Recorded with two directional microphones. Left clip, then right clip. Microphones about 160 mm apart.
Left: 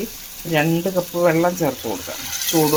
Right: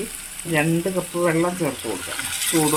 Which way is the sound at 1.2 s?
30° left (ahead or behind).